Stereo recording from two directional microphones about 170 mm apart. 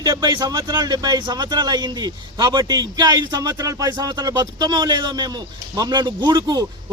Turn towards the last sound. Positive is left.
turn(degrees=-25)  # may be behind; listen again after turning